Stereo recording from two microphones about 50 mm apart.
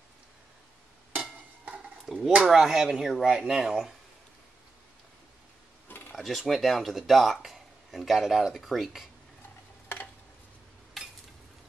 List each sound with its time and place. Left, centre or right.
2.1 s speech: centre
5.9 s a sound: left
6.1 s speech: centre